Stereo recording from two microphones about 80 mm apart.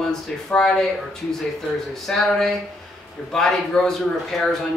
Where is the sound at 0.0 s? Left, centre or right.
Centre.